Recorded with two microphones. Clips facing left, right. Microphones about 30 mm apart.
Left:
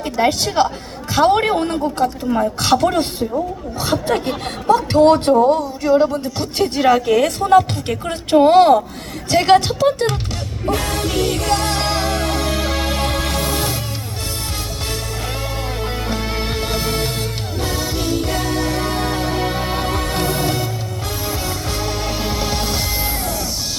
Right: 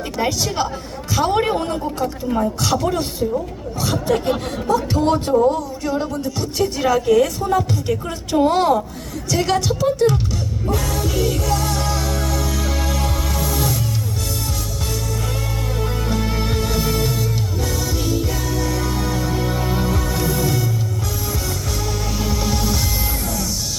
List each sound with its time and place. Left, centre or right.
0.2 s a woman's voice: left
4.7 s speech: left
5.8 s a woman's voice: left
8.0 s a woman's voice: left
10.7 s music: left
16.0 s music: left
22.2 s music: left